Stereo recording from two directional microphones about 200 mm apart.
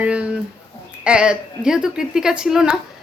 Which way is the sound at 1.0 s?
5° right (ahead or behind).